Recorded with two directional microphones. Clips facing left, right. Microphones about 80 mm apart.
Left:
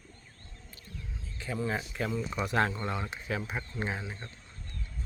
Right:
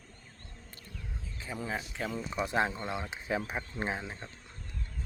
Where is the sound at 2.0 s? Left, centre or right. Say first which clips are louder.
Left 3 dB; centre.